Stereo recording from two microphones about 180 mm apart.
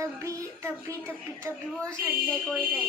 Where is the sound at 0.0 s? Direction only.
15° right (ahead or behind).